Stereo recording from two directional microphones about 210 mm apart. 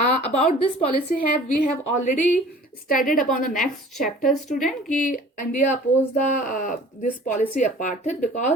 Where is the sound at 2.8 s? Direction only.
40° left (ahead or behind).